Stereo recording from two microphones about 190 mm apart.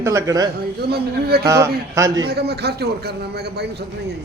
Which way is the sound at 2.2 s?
55° right (ahead or behind).